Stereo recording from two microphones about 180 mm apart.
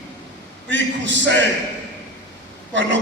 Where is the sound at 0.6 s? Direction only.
90° right.